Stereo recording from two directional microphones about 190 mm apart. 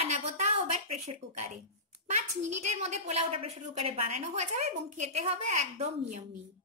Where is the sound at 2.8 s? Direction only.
35° right (ahead or behind).